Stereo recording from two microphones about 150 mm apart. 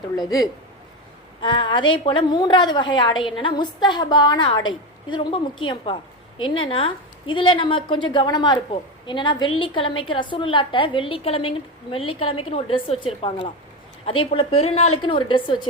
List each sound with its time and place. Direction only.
0.2 s a man's voice: 25° left (ahead or behind)